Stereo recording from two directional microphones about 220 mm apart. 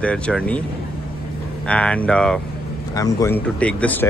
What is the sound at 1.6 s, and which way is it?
Speech, 5° left (ahead or behind).